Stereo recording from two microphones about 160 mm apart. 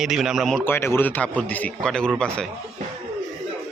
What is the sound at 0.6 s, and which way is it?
A man's voice, 15° left (ahead or behind).